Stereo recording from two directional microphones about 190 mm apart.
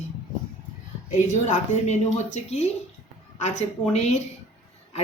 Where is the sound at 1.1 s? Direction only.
40° left (ahead or behind).